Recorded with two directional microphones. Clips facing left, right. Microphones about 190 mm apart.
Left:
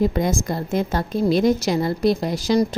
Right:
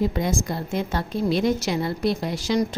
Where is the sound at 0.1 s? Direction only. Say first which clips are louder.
Left 3 dB; 45° left (ahead or behind).